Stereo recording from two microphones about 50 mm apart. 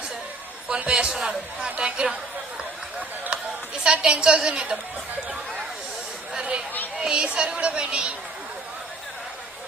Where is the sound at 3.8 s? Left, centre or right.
Centre.